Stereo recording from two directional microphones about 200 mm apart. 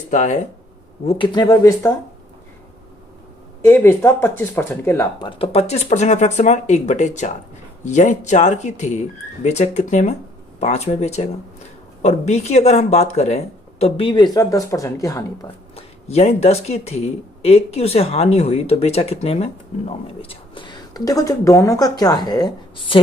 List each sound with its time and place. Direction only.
0.1 s speech: 40° left (ahead or behind)
1.0 s speech: 25° left (ahead or behind)
3.6 s speech: 15° left (ahead or behind)
15.7 s speech: 30° left (ahead or behind)